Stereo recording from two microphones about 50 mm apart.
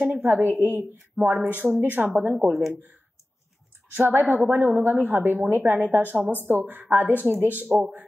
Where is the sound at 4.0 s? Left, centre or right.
Right.